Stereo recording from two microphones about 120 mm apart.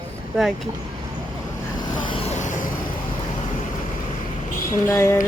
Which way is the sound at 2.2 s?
75° left (ahead or behind).